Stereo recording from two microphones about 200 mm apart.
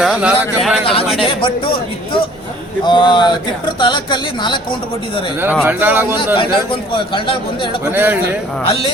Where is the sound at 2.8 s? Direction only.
25° left (ahead or behind).